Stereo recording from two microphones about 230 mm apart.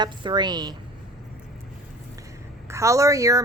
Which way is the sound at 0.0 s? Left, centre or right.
Centre.